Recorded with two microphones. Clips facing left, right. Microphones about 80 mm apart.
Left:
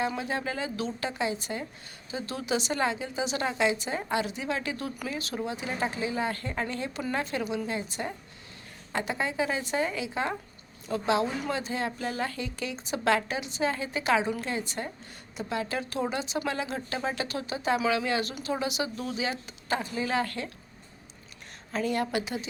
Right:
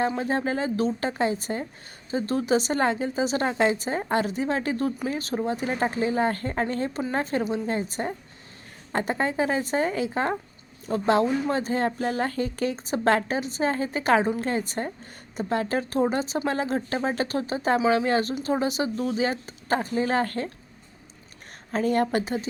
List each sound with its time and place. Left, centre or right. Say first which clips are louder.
0.2 s a woman's voice: right 6 dB; right
21.7 s a woman's voice: right 5 dB; right